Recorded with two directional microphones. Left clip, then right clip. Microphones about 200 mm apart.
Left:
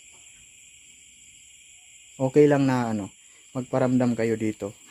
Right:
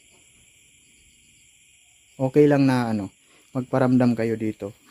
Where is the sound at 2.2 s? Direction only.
10° right (ahead or behind).